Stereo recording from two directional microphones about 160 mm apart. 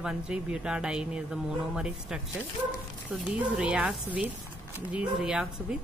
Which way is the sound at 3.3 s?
5° right (ahead or behind).